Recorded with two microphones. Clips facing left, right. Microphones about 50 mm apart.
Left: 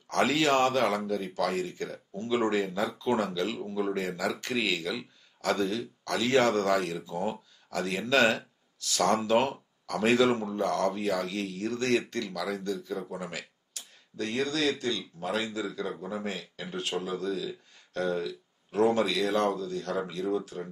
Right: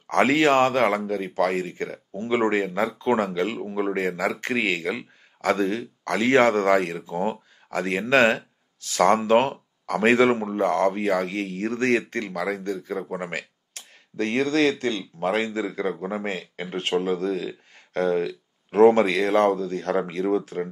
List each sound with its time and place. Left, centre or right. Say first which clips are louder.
0.0 s speech: right 6 dB; right